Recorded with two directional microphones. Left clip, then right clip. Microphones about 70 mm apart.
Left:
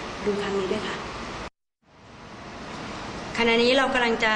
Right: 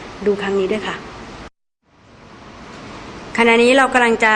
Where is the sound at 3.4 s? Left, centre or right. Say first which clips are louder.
Right 8 dB; right.